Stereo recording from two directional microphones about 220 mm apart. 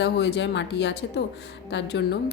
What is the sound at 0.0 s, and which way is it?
A woman's voice, 50° left (ahead or behind).